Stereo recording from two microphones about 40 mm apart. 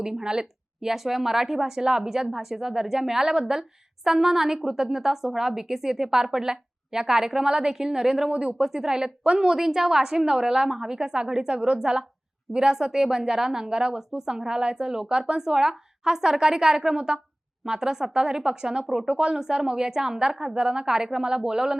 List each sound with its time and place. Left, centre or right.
0.0 s a woman's voice: centre
0.9 s speech: centre
8.3 s speech: right
8.5 s speech: centre
9.5 s speech: centre